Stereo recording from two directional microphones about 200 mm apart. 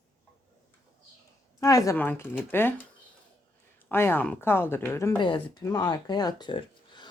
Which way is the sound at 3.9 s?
10° left (ahead or behind).